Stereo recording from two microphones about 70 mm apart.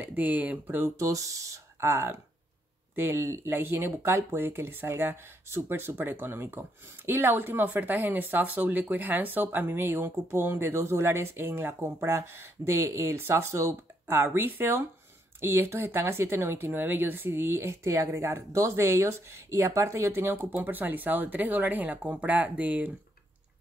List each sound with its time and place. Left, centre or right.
0.0 s speech: right
0.9 s speech: right